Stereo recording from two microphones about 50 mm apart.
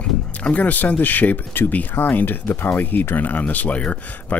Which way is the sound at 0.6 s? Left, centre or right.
Left.